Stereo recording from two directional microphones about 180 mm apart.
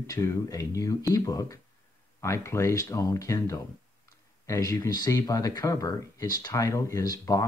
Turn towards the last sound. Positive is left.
turn(degrees=20)  # may be behind; listen again after turning